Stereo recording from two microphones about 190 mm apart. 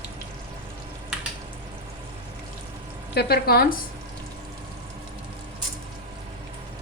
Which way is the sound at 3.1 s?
55° left (ahead or behind).